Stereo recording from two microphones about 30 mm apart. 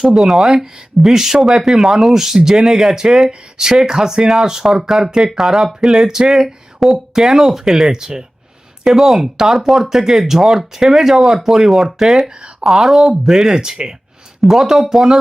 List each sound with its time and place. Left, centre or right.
0.2 s speech: centre
3.6 s speech: centre
4.7 s speech: centre
13.8 s speech: right
14.4 s speech: centre